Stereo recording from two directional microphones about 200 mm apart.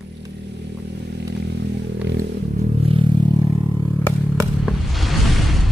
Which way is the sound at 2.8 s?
25° right (ahead or behind).